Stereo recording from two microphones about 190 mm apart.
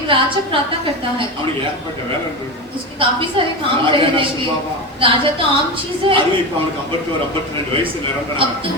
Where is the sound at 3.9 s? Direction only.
25° right (ahead or behind).